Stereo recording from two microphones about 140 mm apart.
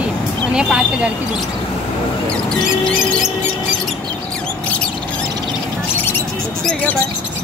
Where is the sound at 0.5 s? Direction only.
5° right (ahead or behind).